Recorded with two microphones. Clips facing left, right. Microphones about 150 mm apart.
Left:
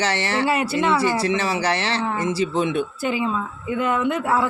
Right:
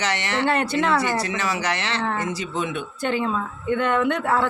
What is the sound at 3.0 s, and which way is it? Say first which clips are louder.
Speech: even; 5° left (ahead or behind).